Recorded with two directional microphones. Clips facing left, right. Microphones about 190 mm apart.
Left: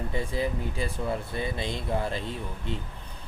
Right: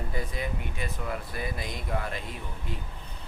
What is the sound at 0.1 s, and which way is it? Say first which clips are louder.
Speech: left 6 dB; 30° left (ahead or behind).